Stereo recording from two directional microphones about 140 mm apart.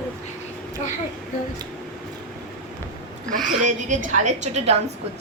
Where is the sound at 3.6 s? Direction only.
60° right (ahead or behind).